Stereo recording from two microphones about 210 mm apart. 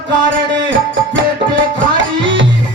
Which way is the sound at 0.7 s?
60° right (ahead or behind).